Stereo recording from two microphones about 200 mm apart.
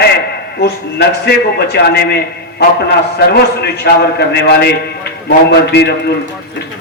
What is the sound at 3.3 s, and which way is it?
A man's voice, 55° left (ahead or behind).